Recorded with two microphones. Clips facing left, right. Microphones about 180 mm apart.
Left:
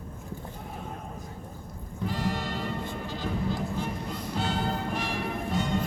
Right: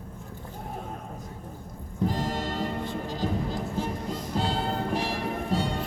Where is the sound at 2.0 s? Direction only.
40° right (ahead or behind).